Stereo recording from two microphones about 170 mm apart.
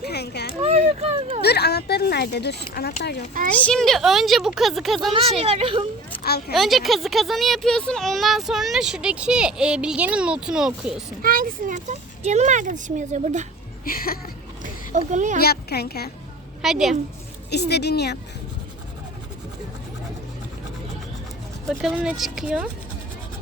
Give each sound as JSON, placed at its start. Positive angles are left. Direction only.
{"t": 0.0, "sound": "a sound", "side_deg": 75}
{"t": 0.6, "sound": "a sound", "side_deg": -35}
{"t": 1.4, "sound": "speech", "side_deg": 70}
{"t": 3.6, "sound": "a child's voice", "side_deg": 5}
{"t": 5.1, "sound": "a woman's voice", "side_deg": -35}
{"t": 6.5, "sound": "a child's voice", "side_deg": 0}
{"t": 11.2, "sound": "speech", "side_deg": -55}
{"t": 13.8, "sound": "speech", "side_deg": 60}
{"t": 14.6, "sound": "a sound", "side_deg": -45}
{"t": 15.4, "sound": "speech", "side_deg": 70}
{"t": 16.6, "sound": "a child's voice", "side_deg": 0}
{"t": 17.5, "sound": "speech", "side_deg": 75}
{"t": 21.7, "sound": "a child's voice", "side_deg": 0}